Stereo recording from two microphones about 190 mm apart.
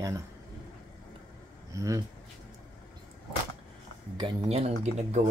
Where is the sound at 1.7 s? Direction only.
15° right (ahead or behind).